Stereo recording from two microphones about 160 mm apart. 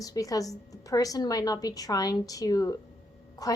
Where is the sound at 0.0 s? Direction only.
20° left (ahead or behind).